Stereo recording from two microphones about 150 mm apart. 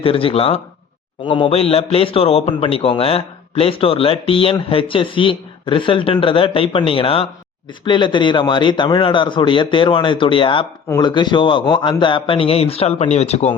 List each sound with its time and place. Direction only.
0.0 s a man's voice: 40° left (ahead or behind)